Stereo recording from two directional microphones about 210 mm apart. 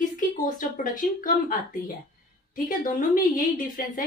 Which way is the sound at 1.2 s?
40° left (ahead or behind).